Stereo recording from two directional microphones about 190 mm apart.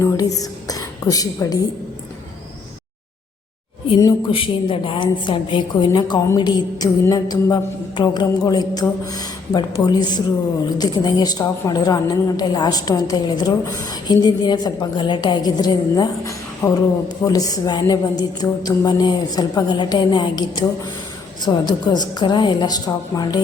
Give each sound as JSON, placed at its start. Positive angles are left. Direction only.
{"t": 0.0, "sound": "a woman's voice", "side_deg": 20}
{"t": 3.8, "sound": "a woman's voice", "side_deg": 25}